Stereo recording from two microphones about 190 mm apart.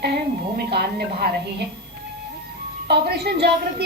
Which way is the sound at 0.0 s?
55° right (ahead or behind).